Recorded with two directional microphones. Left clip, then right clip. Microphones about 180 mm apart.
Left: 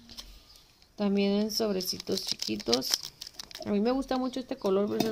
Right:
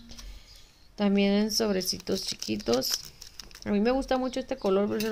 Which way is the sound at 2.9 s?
25° left (ahead or behind).